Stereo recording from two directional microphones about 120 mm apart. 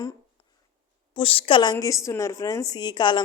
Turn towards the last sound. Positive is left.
turn(degrees=40)  # may be behind; listen again after turning